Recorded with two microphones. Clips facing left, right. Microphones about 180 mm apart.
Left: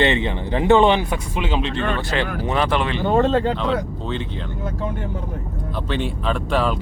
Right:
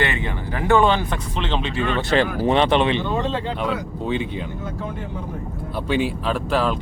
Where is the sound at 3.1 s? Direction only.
50° left (ahead or behind).